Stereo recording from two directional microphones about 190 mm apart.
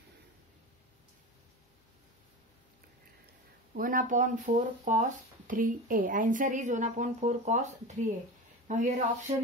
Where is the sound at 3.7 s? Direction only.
45° right (ahead or behind).